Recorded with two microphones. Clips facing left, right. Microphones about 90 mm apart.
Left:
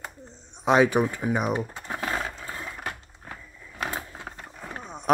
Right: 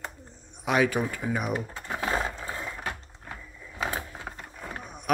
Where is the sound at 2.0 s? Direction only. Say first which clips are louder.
Right 1 dB; 10° right (ahead or behind).